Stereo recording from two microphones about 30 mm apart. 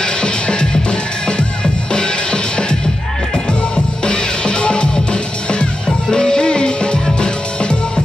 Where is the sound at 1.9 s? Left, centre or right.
Left.